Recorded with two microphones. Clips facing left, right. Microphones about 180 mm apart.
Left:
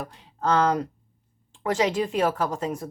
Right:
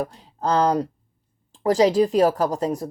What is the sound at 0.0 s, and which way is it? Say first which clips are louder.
Speech: right 3 dB; 35° right (ahead or behind).